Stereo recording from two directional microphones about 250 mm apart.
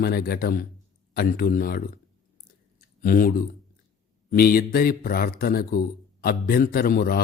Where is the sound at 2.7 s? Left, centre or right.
Left.